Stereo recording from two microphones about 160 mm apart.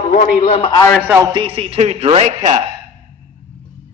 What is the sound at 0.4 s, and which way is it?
Speech, 40° left (ahead or behind).